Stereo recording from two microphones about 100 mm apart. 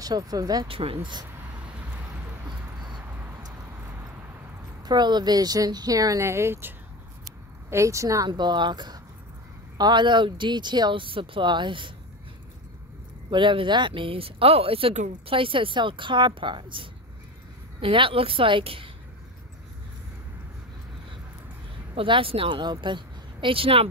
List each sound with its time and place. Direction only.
0.0 s speech: 40° right (ahead or behind)
0.7 s speech: 70° right (ahead or behind)
4.8 s speech: 45° right (ahead or behind); by 6.7 s 25° right (ahead or behind)
7.7 s speech: 30° right (ahead or behind)
8.3 s speech: 50° right (ahead or behind)
13.3 s speech: 55° right (ahead or behind)
21.9 s a woman's voice: 60° right (ahead or behind)